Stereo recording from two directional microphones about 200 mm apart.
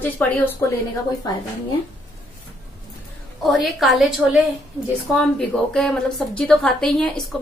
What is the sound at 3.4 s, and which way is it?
Speech, centre (ahead or behind).